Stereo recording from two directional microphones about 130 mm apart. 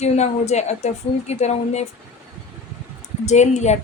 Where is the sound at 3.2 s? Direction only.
60° left (ahead or behind).